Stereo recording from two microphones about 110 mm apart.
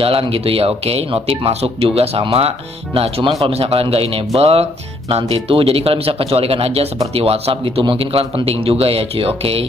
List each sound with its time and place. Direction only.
0.0 s speech: 60° right (ahead or behind)